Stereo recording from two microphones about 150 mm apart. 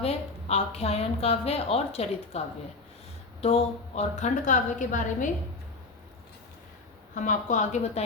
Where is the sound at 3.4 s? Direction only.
45° left (ahead or behind).